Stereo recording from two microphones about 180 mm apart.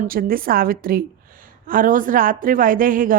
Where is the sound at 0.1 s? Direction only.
55° right (ahead or behind).